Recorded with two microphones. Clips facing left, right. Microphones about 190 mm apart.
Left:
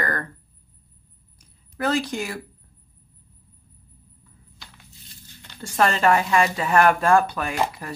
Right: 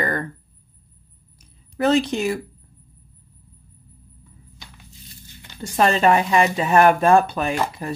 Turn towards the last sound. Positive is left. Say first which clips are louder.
# right 3 dB
turn(degrees=-25)  # may be behind; listen again after turning